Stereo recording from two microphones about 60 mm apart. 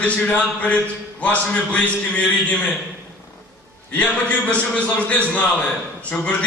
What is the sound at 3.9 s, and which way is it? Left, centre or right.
A man's voice, left.